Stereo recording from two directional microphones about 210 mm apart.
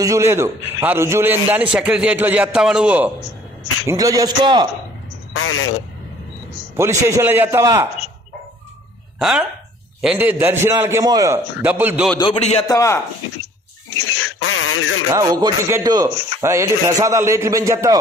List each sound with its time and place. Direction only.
0.0 s a man's voice: 15° right (ahead or behind)
3.8 s a man's voice: 15° right (ahead or behind)
5.3 s speech: 85° left
6.8 s a man's voice: 15° right (ahead or behind)
9.2 s a man's voice: 5° right (ahead or behind)
12.2 s a man's voice: 30° left (ahead or behind)
12.6 s speech: 15° left (ahead or behind)
14.2 s a sound: 85° left
15.0 s a man's voice: 20° right (ahead or behind)